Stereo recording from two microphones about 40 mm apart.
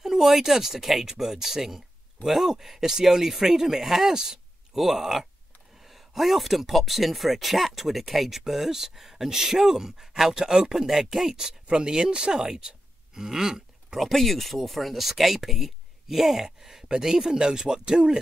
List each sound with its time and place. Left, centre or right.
0.0 s speech: centre
13.9 s speech: centre